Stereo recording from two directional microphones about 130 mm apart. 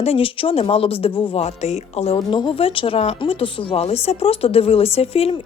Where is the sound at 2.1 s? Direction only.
40° left (ahead or behind).